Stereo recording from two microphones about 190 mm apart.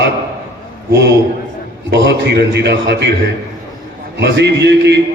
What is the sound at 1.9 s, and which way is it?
A man's voice, 60° right (ahead or behind).